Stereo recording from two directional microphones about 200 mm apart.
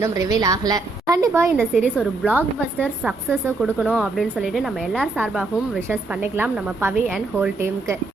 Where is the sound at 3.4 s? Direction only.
10° right (ahead or behind).